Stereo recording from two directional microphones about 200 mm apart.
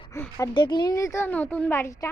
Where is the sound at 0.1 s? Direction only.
15° left (ahead or behind).